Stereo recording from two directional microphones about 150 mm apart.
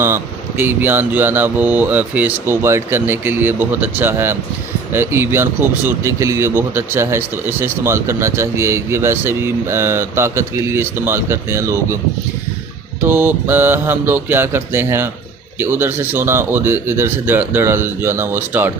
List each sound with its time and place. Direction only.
0.0 s speech: 15° right (ahead or behind)
13.0 s speech: 15° right (ahead or behind)